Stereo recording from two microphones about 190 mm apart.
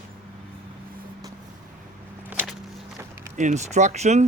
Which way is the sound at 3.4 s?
40° right (ahead or behind).